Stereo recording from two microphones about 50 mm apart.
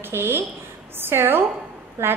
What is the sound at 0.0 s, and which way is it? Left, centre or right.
A woman's voice, right.